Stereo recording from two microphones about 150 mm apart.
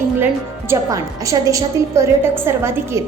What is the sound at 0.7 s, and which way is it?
A woman's voice, 20° right (ahead or behind).